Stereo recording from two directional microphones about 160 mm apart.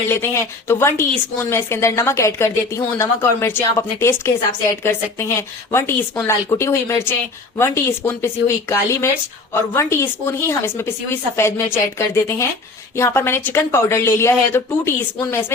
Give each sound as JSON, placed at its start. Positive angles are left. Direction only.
{"t": 0.1, "sound": "speech", "side_deg": 15}